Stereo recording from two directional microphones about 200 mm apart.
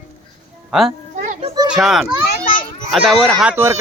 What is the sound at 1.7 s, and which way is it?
A child's voice, centre (ahead or behind).